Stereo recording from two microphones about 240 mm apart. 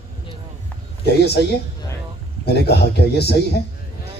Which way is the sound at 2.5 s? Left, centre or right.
Left.